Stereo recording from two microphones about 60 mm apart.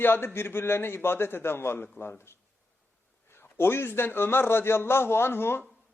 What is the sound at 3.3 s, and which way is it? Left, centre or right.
A man's voice, left.